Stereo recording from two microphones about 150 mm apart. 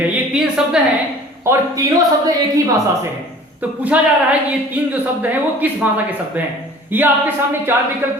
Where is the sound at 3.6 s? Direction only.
10° right (ahead or behind).